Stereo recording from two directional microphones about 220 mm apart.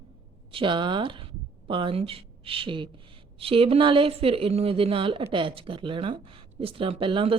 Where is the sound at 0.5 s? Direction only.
20° right (ahead or behind).